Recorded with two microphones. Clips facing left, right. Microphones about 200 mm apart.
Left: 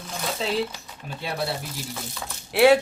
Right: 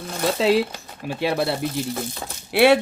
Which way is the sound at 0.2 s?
80° right.